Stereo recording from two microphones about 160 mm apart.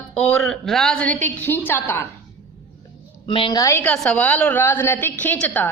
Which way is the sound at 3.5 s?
20° left (ahead or behind).